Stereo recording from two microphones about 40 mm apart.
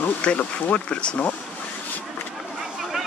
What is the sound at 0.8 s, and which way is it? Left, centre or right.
Speech, left.